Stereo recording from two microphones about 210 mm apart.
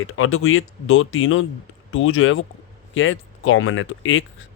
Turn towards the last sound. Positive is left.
turn(degrees=65)  # may be behind; listen again after turning